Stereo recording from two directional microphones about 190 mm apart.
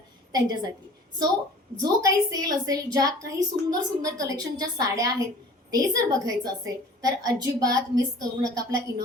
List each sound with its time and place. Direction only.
0.3 s a woman's voice: 20° right (ahead or behind)
1.8 s a woman's voice: 20° right (ahead or behind)